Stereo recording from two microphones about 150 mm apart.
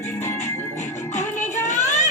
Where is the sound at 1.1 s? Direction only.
50° left (ahead or behind).